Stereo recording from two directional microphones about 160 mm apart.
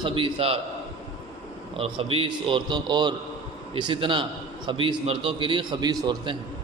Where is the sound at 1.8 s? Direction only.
35° right (ahead or behind).